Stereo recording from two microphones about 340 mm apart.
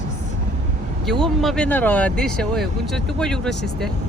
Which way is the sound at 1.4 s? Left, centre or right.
Centre.